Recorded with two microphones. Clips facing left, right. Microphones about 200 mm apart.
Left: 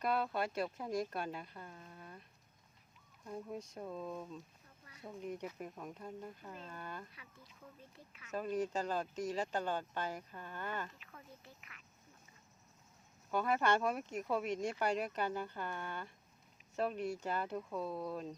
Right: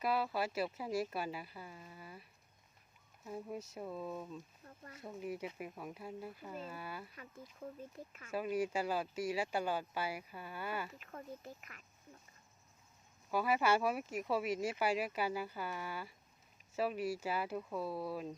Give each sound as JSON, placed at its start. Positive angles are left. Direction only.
{"t": 0.0, "sound": "speech", "side_deg": -5}
{"t": 3.2, "sound": "speech", "side_deg": -5}
{"t": 7.2, "sound": "speech", "side_deg": -45}
{"t": 8.3, "sound": "speech", "side_deg": -10}
{"t": 10.9, "sound": "speech", "side_deg": -45}
{"t": 13.3, "sound": "speech", "side_deg": -5}